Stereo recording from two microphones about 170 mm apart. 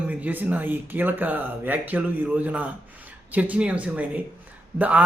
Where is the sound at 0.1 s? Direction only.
10° right (ahead or behind).